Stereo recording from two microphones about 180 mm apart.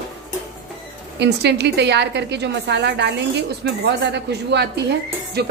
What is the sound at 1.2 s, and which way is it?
A woman's voice, 70° right (ahead or behind).